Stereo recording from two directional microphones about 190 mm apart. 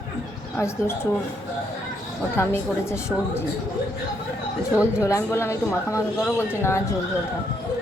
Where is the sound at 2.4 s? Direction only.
15° left (ahead or behind).